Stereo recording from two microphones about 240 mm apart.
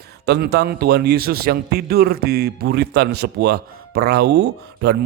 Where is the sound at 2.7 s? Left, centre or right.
Right.